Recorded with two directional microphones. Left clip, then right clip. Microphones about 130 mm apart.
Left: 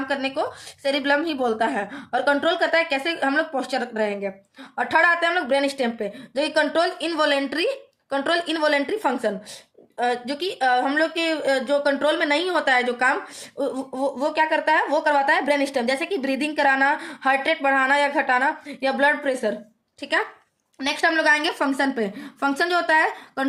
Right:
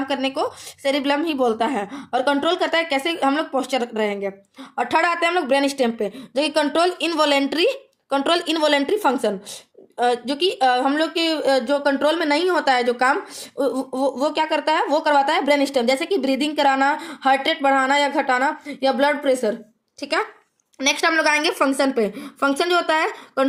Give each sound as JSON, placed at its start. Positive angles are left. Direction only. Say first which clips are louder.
{"t": 0.1, "sound": "a woman's voice", "louder": "right 1 dB", "side_deg": -35}